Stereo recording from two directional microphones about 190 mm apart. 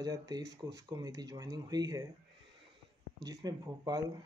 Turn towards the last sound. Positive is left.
turn(degrees=-20)  # may be behind; listen again after turning